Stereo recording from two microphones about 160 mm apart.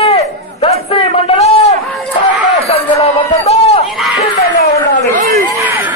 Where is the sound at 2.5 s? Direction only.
40° left (ahead or behind).